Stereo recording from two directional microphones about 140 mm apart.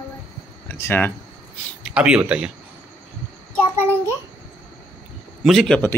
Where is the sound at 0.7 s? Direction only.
15° left (ahead or behind).